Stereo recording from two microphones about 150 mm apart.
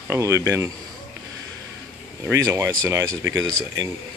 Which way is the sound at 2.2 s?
20° right (ahead or behind).